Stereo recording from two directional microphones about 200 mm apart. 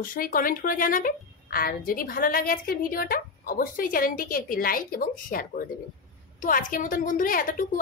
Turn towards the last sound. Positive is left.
turn(degrees=40)  # may be behind; listen again after turning